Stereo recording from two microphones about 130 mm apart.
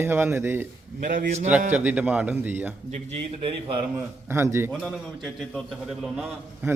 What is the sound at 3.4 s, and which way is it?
Speech, 40° right (ahead or behind).